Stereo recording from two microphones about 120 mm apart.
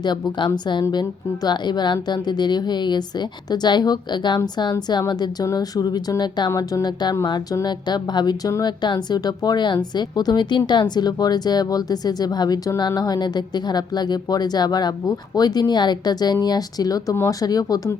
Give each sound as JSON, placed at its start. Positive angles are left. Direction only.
{"t": 0.0, "sound": "speech", "side_deg": 40}